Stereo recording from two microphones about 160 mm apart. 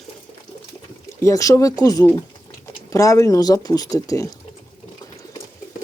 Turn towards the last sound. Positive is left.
turn(degrees=20)  # may be behind; listen again after turning